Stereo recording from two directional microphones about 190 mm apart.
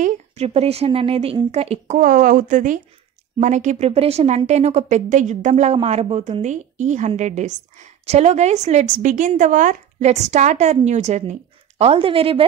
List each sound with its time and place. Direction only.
0.0 s speech: 35° right (ahead or behind)